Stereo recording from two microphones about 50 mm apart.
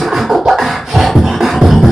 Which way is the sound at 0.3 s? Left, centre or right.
Centre.